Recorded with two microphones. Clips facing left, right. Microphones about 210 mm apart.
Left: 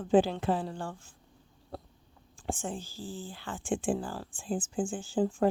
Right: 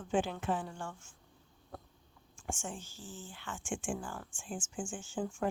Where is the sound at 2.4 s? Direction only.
35° left (ahead or behind).